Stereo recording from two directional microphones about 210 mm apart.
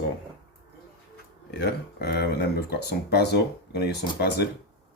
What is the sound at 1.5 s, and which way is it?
Speech, 50° left (ahead or behind).